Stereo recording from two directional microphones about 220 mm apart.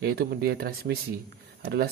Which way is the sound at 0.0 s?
45° right (ahead or behind).